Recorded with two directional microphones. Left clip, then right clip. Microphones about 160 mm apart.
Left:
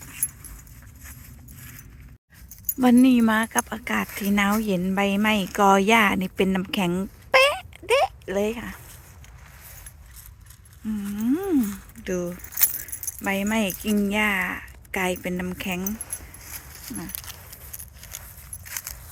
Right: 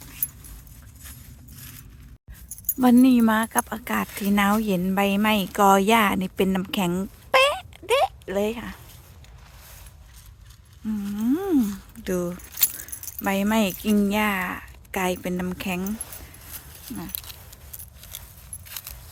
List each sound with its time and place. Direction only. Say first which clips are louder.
2.7 s speech: even; 15° right (ahead or behind)
11.1 s a sound: right 1 dB; 10° right (ahead or behind)
12.0 s speech: right 1 dB; 25° right (ahead or behind)
12.6 s keys jangling: left 1 dB; 15° right (ahead or behind)
13.2 s speech: right 2 dB; 20° right (ahead or behind)